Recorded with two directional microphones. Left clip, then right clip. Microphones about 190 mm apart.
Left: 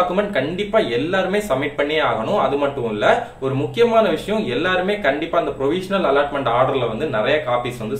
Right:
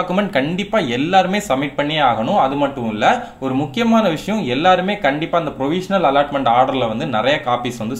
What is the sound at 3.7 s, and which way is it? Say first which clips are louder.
Speech: left 2 dB; 40° right (ahead or behind).